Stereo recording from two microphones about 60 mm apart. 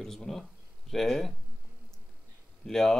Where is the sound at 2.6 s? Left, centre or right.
Centre.